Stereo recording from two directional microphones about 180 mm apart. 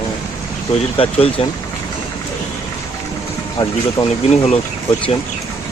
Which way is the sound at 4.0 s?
30° left (ahead or behind).